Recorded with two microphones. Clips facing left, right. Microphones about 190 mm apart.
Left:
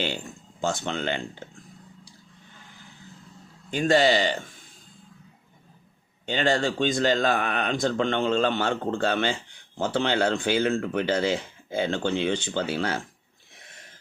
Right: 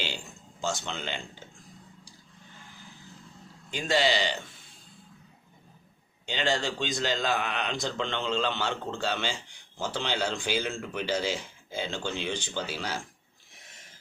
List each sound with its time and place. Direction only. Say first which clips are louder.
0.6 s speech: left 6 dB; 55° left (ahead or behind)
3.7 s speech: left 6 dB; 50° left (ahead or behind)
6.2 s speech: left 5 dB; 50° left (ahead or behind)